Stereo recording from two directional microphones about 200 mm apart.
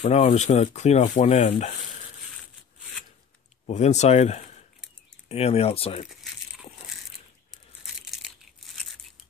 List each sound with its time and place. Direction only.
0.0 s speech: 30° left (ahead or behind)
3.6 s speech: 35° left (ahead or behind)
7.8 s crushing: centre (ahead or behind)